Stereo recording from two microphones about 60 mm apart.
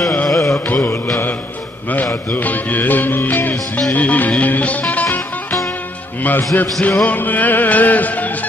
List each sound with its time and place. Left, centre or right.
0.3 s carnatic music: left
0.7 s mantra: left
2.3 s speech: left
3.9 s music: left
6.2 s music: left